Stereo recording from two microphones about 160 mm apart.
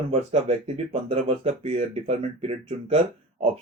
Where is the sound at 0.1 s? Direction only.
40° right (ahead or behind).